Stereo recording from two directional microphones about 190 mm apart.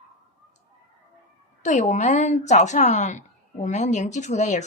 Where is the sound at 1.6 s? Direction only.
40° left (ahead or behind).